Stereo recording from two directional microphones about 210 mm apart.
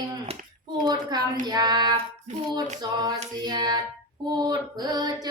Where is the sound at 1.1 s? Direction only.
20° right (ahead or behind).